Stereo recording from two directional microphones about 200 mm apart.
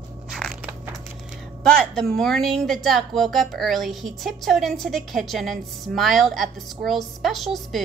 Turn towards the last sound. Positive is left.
turn(degrees=0)  # may be behind; listen again after turning